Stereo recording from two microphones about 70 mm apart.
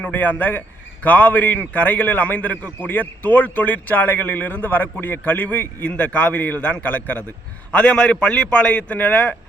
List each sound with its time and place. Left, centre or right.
0.0 s a man's voice: left